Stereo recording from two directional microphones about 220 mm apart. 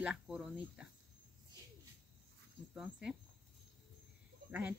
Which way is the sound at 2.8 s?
Centre (ahead or behind).